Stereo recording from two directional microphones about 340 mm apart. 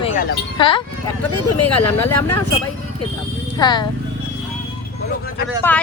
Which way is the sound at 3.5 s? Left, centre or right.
Centre.